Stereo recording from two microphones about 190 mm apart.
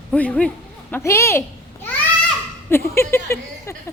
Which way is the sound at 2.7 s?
10° left (ahead or behind).